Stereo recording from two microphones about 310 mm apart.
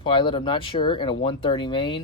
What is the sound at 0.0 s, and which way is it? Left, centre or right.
Speech, centre.